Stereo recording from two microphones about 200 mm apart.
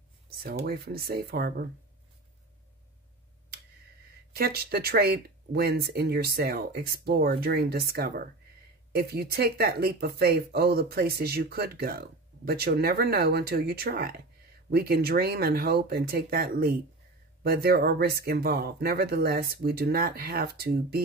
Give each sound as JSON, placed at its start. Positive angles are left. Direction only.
{"t": 0.4, "sound": "speech", "side_deg": -50}
{"t": 4.3, "sound": "speech", "side_deg": -50}